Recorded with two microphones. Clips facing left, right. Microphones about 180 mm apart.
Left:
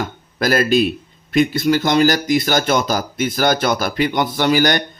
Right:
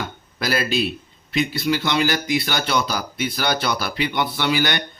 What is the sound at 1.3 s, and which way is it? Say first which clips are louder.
Speech: left 6 dB; 50° left (ahead or behind).